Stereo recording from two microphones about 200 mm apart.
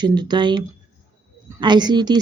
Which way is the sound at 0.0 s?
20° right (ahead or behind).